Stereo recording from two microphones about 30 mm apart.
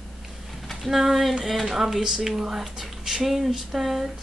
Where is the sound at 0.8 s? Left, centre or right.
Centre.